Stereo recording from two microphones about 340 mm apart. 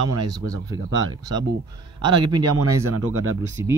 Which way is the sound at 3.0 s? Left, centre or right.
Right.